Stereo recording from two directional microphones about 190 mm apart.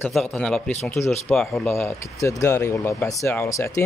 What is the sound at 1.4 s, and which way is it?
Speech, centre (ahead or behind).